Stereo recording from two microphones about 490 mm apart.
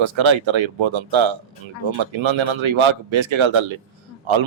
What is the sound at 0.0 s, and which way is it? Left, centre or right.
Speech, right.